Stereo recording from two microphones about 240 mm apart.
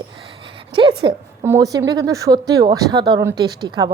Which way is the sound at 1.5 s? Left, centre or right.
Centre.